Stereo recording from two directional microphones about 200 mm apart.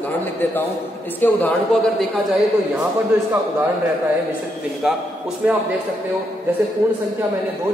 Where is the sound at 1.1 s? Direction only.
10° left (ahead or behind).